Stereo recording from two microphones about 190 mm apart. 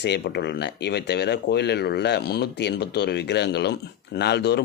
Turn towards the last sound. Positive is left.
turn(degrees=60)  # may be behind; listen again after turning